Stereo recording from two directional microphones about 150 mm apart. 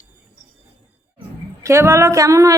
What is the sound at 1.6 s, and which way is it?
Speech, 20° right (ahead or behind).